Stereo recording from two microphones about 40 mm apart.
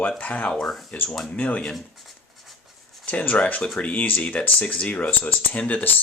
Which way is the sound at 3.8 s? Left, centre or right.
Left.